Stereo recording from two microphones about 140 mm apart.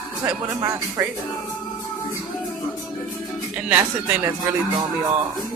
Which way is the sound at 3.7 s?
10° right (ahead or behind).